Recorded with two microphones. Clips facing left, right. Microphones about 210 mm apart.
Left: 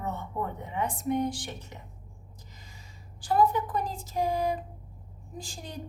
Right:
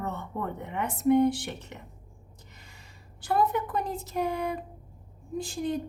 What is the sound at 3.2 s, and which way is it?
A woman's voice, 65° right (ahead or behind).